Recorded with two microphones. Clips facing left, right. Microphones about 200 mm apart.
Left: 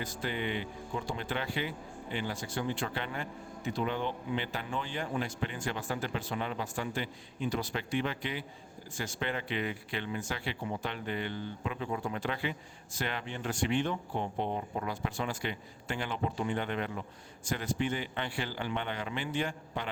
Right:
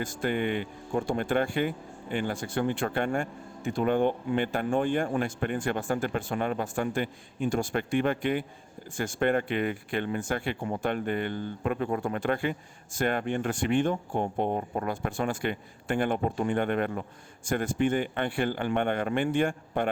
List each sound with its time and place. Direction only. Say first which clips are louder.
0.0 s speech: right 7 dB; 50° right (ahead or behind)